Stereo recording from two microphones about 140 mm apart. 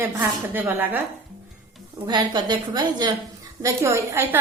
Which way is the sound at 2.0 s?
30° right (ahead or behind).